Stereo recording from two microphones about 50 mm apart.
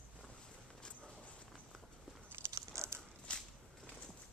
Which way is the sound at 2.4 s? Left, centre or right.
Right.